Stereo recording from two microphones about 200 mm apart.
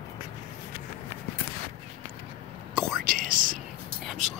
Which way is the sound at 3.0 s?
45° right (ahead or behind).